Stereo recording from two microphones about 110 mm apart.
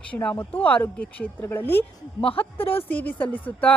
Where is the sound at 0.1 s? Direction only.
10° left (ahead or behind).